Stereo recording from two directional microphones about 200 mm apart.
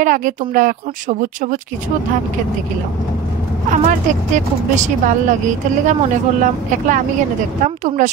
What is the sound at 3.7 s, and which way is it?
Speech, 40° right (ahead or behind).